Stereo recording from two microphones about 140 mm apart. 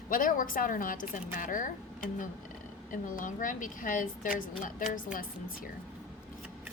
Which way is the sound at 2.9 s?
70° left (ahead or behind).